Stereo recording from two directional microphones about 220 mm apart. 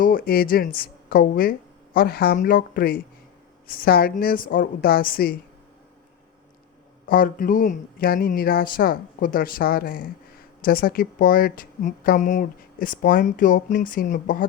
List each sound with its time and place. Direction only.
0.0 s speech: 40° left (ahead or behind)
7.1 s speech: 40° left (ahead or behind)